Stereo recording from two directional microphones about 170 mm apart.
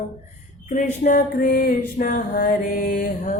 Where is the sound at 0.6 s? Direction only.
50° left (ahead or behind).